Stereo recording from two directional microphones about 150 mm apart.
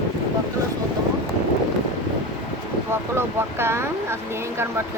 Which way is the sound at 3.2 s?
15° right (ahead or behind).